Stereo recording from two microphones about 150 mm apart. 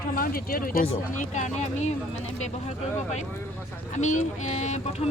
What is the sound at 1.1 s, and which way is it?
Speech, 55° left (ahead or behind).